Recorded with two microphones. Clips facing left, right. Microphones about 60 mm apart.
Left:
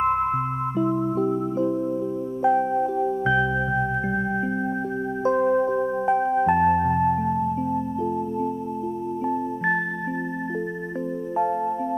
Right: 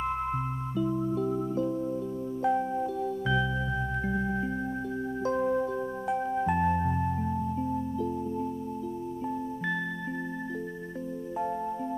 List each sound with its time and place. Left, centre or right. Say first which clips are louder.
0.0 s music: left 9 dB; left
0.7 s music: left 5 dB; left
2.4 s music: left 7 dB; left
5.2 s music: left 8 dB; left
11.3 s music: left 9 dB; left